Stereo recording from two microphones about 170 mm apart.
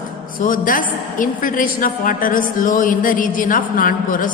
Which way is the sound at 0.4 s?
55° left (ahead or behind).